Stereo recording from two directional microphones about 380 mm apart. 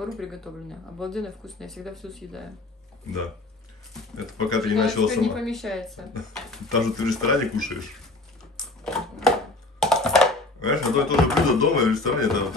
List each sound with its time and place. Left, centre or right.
0.0 s speech: centre
4.5 s speech: centre
8.5 s typewriter: centre
9.8 s computer keyboard: centre
10.8 s speech: centre